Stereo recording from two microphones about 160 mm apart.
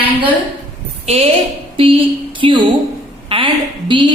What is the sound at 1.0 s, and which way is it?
A woman's voice, 40° right (ahead or behind).